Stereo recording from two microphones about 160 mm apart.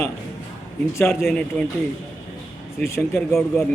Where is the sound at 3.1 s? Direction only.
Centre (ahead or behind).